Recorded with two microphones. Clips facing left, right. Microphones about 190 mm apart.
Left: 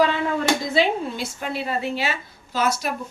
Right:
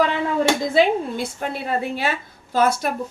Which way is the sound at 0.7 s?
50° right (ahead or behind).